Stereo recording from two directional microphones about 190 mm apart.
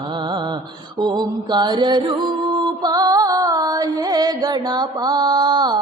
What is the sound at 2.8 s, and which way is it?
Music, 20° right (ahead or behind).